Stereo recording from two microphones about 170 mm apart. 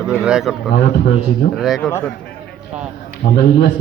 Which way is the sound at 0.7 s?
70° left (ahead or behind).